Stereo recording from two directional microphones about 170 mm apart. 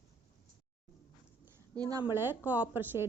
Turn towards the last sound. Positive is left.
turn(degrees=-10)  # may be behind; listen again after turning